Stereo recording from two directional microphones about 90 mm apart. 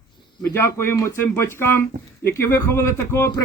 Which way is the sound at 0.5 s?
30° left (ahead or behind).